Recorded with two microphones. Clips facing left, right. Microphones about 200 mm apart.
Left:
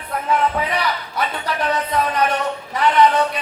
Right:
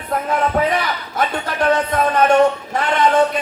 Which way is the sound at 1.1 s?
50° right (ahead or behind).